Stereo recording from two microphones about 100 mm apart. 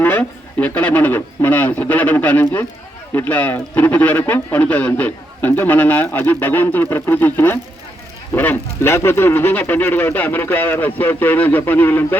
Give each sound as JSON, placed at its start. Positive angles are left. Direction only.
{"t": 0.0, "sound": "speech", "side_deg": 20}